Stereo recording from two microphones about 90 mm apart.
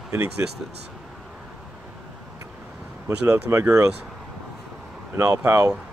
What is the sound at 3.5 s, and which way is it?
Speech, 30° right (ahead or behind).